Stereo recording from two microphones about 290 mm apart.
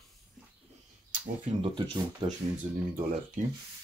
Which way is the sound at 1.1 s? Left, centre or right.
Right.